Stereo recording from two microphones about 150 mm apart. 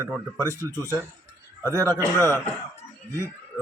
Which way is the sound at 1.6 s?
15° right (ahead or behind).